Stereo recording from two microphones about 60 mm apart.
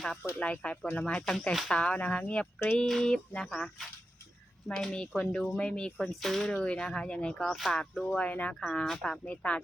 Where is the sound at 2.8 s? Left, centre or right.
Centre.